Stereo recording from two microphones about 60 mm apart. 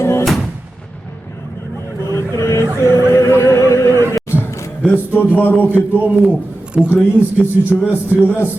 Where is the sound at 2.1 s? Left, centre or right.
Left.